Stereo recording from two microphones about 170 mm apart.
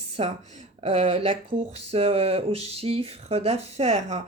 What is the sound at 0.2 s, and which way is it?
Speech, 35° right (ahead or behind).